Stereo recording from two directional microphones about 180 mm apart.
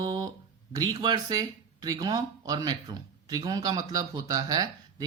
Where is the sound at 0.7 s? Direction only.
20° right (ahead or behind).